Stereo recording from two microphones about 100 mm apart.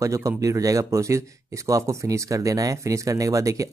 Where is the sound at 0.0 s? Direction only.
35° right (ahead or behind).